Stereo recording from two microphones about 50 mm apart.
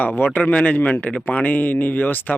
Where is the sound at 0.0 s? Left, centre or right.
Left.